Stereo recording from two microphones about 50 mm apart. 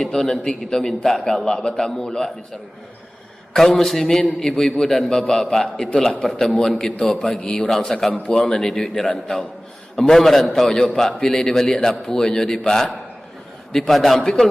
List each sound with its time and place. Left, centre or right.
0.0 s a man's voice: centre
3.5 s a man's voice: centre; by 8.5 s left
8.8 s a man's voice: centre
10.8 s a man's voice: centre